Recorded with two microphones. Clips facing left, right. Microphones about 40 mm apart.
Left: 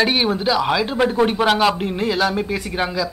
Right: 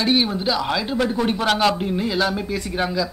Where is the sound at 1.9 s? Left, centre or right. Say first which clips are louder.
Left 2 dB; left.